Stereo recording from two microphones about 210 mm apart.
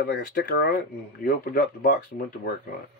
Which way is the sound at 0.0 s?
50° left (ahead or behind).